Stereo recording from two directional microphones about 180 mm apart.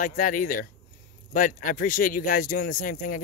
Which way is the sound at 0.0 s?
50° left (ahead or behind).